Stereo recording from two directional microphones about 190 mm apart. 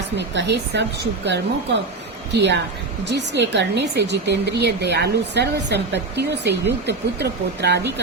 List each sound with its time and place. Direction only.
0.2 s speech: 65° right (ahead or behind)